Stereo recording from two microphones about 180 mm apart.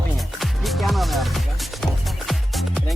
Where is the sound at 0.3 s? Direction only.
Centre (ahead or behind).